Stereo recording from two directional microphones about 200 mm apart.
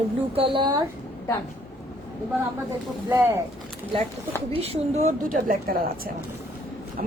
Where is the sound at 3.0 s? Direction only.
15° right (ahead or behind).